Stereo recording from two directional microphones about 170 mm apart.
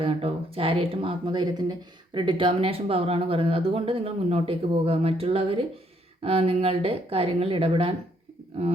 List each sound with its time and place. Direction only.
0.0 s speech: 35° right (ahead or behind)